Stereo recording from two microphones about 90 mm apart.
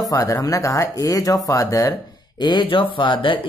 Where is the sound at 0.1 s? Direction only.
40° left (ahead or behind).